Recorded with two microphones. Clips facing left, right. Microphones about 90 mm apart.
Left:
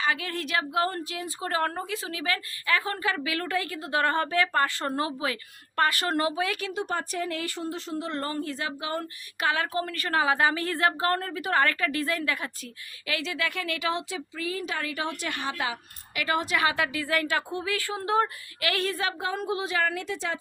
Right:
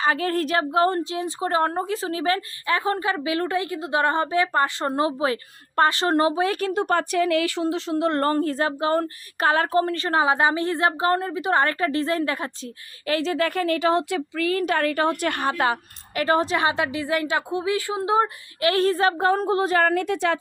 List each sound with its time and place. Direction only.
0.0 s a woman's voice: 40° right (ahead or behind)
14.1 s a woman's voice: 65° right (ahead or behind); by 18.3 s 20° right (ahead or behind)
18.6 s a woman's voice: 35° right (ahead or behind); by 20.4 s 65° right (ahead or behind)